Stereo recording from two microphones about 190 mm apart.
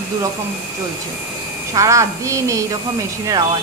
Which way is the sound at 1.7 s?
15° right (ahead or behind).